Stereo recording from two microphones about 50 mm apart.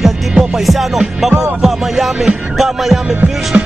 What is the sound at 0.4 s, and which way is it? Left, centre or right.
Music, centre.